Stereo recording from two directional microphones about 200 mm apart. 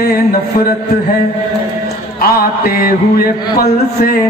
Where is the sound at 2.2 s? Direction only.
50° left (ahead or behind).